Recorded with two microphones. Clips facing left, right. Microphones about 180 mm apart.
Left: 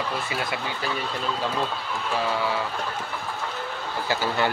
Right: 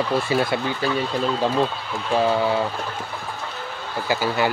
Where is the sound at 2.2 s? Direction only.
30° right (ahead or behind).